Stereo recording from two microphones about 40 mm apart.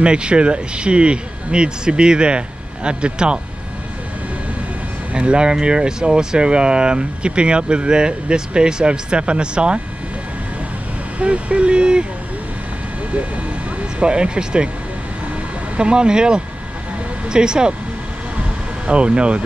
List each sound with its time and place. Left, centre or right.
0.0 s speech: right
5.1 s speech: right
11.1 s speech: right
13.9 s speech: right
15.7 s speech: right
18.9 s speech: right